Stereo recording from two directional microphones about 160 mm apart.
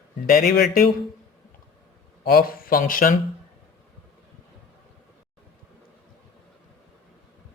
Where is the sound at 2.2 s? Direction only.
65° left (ahead or behind).